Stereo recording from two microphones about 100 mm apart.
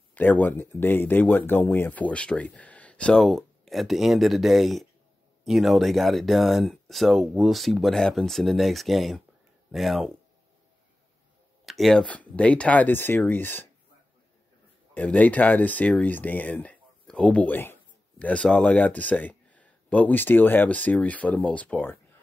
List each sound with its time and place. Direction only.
0.1 s speech: 20° left (ahead or behind); by 10.1 s centre (ahead or behind)
11.6 s speech: centre (ahead or behind); by 13.7 s 20° left (ahead or behind)
15.0 s speech: 15° left (ahead or behind)